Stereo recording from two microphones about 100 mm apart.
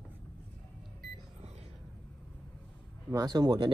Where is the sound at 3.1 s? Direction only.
40° right (ahead or behind).